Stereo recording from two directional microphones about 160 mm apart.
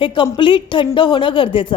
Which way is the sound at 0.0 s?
30° left (ahead or behind).